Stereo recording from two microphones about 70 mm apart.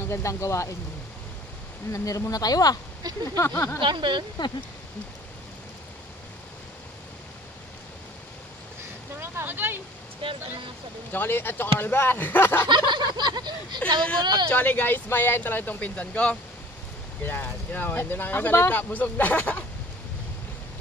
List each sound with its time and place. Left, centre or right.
0.1 s speech: left
1.9 s speech: left
3.0 s speech: right
3.3 s speech: left
9.2 s vehicle: right
11.1 s speech: left
12.6 s a sound: right
13.7 s speech: centre
17.2 s speech: left